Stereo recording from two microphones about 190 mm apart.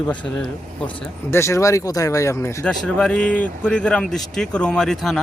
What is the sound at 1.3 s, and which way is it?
Speech, 15° left (ahead or behind).